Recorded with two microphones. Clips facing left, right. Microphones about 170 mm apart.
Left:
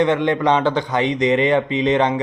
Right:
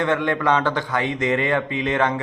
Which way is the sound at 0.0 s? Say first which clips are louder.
Left 4 dB; 20° left (ahead or behind).